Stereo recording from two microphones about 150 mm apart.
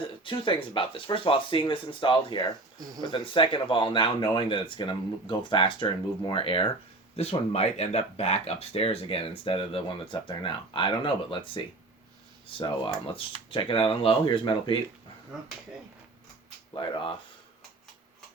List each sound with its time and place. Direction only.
0.3 s speech: 35° left (ahead or behind)
16.7 s speech: 35° left (ahead or behind)